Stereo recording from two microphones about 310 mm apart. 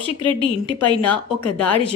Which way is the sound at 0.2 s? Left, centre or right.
Centre.